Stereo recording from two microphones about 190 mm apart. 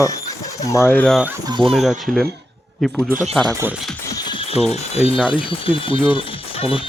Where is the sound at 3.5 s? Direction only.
10° right (ahead or behind).